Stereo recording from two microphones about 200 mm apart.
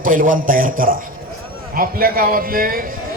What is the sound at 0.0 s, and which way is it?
A man's voice, 45° right (ahead or behind).